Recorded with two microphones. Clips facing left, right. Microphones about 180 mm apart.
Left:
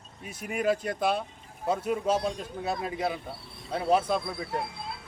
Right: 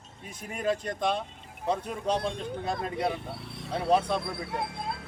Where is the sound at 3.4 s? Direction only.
75° right (ahead or behind).